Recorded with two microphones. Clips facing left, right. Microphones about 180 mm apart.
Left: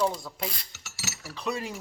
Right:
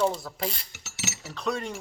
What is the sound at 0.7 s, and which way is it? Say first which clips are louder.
Mechanisms: right 4 dB; 20° right (ahead or behind).